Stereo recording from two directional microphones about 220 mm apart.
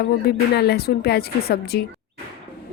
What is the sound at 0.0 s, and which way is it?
A woman's voice, 45° left (ahead or behind).